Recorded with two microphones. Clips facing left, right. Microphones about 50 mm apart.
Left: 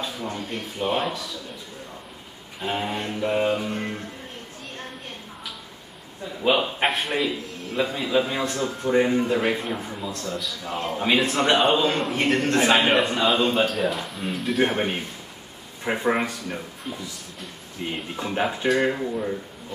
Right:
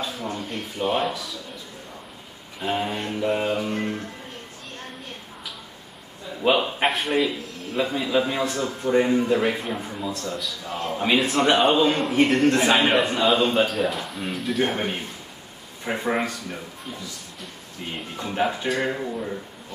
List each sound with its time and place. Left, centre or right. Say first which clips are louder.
0.0 s a sound: right 1 dB; centre
0.5 s a man's voice: right 1 dB; centre
2.6 s a man's voice: right 1 dB; centre
6.4 s a man's voice: right 1 dB; centre
14.6 s speech: left 2 dB; centre
18.1 s speech: right 2 dB; centre